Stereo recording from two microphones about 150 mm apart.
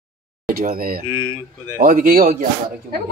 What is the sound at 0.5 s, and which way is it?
Speech, 70° right (ahead or behind).